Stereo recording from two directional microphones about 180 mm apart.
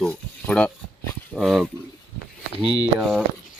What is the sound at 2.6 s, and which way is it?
Speech, 35° right (ahead or behind).